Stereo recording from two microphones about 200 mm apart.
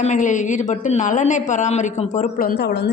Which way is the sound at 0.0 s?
35° left (ahead or behind).